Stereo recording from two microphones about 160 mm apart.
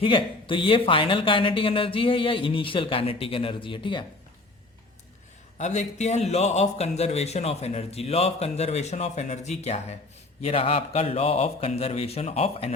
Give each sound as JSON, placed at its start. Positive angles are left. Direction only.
{"t": 0.0, "sound": "speech", "side_deg": 35}
{"t": 5.5, "sound": "speech", "side_deg": 45}